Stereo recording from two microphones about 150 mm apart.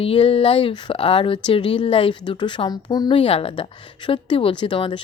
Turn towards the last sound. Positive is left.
turn(degrees=35)  # may be behind; listen again after turning